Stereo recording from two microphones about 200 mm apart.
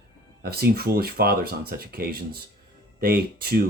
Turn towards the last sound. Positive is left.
turn(degrees=-50)  # may be behind; listen again after turning